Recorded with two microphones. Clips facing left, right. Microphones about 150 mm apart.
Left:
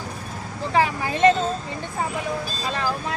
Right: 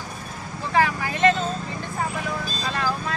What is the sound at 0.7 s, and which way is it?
Vehicle, 20° left (ahead or behind).